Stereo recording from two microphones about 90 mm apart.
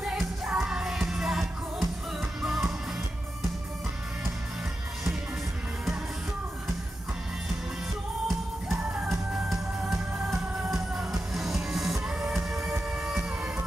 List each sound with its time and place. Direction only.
0.0 s music: 10° right (ahead or behind)
8.8 s music: 15° right (ahead or behind)
9.1 s music: 5° right (ahead or behind)